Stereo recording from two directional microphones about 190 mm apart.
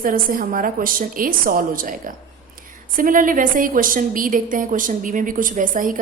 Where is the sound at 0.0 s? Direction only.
45° right (ahead or behind).